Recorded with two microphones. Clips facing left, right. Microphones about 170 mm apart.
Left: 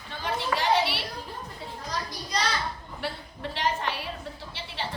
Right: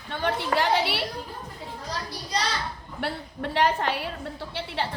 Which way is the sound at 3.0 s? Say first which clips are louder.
Right 4 dB; 60° right (ahead or behind).